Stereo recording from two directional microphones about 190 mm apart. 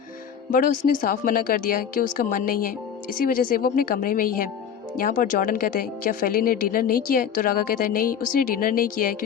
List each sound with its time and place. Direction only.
0.5 s speech: 50° left (ahead or behind)